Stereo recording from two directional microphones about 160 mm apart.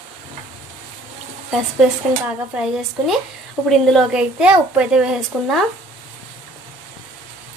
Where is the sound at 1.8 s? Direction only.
5° right (ahead or behind).